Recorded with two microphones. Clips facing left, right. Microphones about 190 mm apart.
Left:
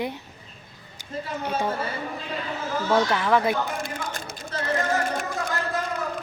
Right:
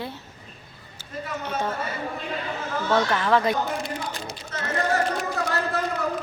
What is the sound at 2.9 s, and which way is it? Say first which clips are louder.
Speech: even; 10° left (ahead or behind).